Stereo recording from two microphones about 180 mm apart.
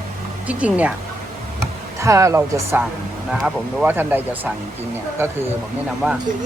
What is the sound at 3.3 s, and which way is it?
Speech, 5° right (ahead or behind).